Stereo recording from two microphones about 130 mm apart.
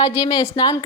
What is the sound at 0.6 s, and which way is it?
Speech, 35° left (ahead or behind).